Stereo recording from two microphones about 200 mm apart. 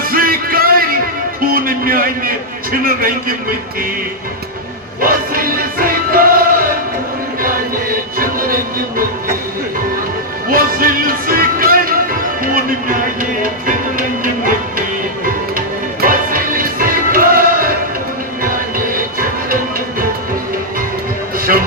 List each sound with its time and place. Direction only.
0.0 s music: 45° right (ahead or behind)
2.8 s a man's voice: 45° right (ahead or behind)
4.9 s music: 45° right (ahead or behind)
10.5 s music: 45° right (ahead or behind)
15.5 s music: 45° right (ahead or behind)
21.3 s music: 45° right (ahead or behind)